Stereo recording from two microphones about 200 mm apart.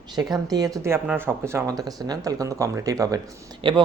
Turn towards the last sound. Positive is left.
turn(degrees=-25)  # may be behind; listen again after turning